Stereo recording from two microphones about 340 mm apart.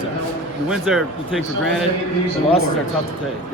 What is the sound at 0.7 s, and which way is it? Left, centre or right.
Speech, centre.